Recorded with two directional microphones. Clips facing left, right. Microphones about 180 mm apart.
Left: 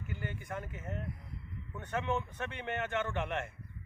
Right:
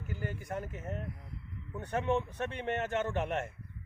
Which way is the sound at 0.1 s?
35° right (ahead or behind).